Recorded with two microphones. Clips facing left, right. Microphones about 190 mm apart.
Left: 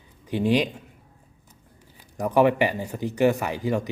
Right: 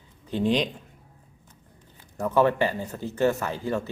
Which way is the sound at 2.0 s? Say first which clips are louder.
Left 2 dB; 15° left (ahead or behind).